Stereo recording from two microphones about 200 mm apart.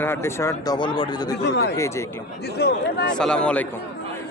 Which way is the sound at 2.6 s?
55° left (ahead or behind).